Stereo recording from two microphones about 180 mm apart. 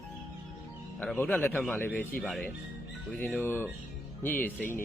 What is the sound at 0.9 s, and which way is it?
Speech, 10° left (ahead or behind).